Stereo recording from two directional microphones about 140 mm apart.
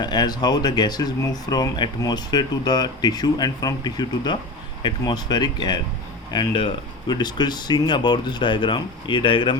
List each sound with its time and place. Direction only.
0.0 s speech: 30° left (ahead or behind)